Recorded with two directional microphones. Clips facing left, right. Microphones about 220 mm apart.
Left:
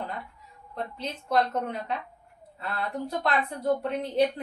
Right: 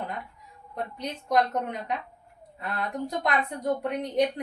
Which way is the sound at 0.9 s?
15° right (ahead or behind).